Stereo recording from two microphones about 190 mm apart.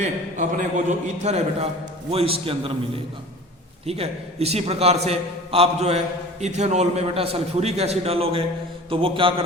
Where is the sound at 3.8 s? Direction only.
35° right (ahead or behind).